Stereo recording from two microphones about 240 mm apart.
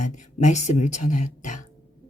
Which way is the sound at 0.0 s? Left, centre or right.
Left.